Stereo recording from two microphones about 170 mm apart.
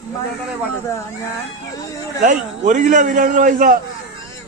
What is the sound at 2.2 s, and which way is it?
A man's voice, 45° right (ahead or behind).